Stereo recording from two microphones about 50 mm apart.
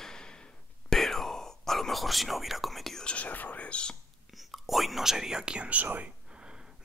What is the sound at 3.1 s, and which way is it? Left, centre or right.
Speech, left.